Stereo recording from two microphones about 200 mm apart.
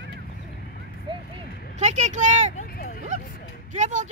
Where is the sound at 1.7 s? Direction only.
35° right (ahead or behind).